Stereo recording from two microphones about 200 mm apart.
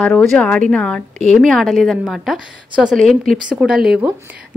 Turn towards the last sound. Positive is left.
turn(degrees=-5)  # may be behind; listen again after turning